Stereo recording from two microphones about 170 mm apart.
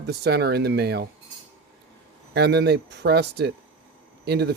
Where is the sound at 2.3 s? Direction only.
75° right (ahead or behind).